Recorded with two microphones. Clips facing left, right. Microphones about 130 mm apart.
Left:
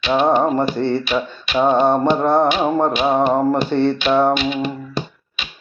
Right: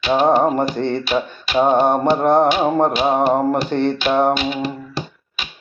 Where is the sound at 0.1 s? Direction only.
15° right (ahead or behind).